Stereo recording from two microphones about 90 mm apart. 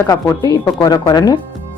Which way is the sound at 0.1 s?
45° left (ahead or behind).